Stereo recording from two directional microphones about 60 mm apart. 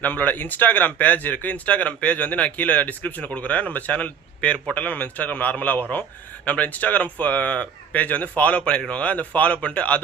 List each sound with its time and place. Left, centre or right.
0.0 s speech: left